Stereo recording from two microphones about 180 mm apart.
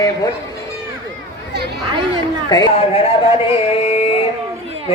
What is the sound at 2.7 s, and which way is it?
Speech, 35° left (ahead or behind).